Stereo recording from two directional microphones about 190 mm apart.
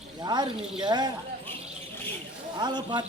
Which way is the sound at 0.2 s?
20° right (ahead or behind).